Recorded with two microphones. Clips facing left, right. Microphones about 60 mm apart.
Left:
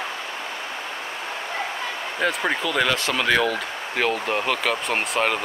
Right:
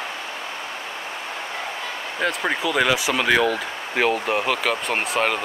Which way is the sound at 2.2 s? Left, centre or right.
Centre.